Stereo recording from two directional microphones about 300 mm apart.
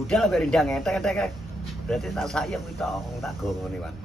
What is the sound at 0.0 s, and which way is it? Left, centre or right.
Speech, centre.